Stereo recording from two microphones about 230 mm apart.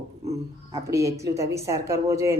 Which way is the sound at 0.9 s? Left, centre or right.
Centre.